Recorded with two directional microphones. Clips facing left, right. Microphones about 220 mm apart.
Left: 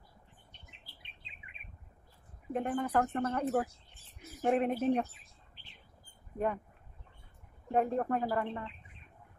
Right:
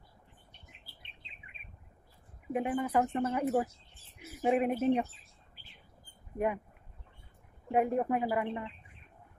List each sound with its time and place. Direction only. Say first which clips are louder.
2.5 s speech: right 1 dB; 10° right (ahead or behind)
4.2 s a sound: right 1 dB; 5° right (ahead or behind)
6.3 s speech: right 2 dB; 10° right (ahead or behind)
7.7 s speech: right 2 dB; 10° right (ahead or behind)